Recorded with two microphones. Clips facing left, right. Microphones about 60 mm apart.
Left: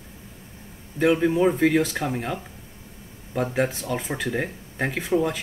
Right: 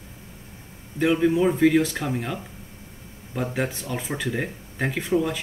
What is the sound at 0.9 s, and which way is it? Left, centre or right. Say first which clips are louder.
Speech: even; centre.